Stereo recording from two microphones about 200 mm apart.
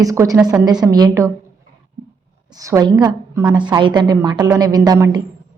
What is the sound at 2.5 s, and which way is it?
A woman's voice, 15° right (ahead or behind).